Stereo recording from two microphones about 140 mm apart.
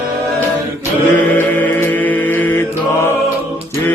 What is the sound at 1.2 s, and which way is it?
Mantra, 10° left (ahead or behind).